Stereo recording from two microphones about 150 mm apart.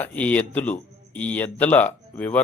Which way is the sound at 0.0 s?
10° left (ahead or behind).